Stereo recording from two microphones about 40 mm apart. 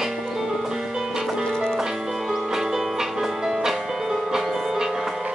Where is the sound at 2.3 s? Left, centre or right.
Centre.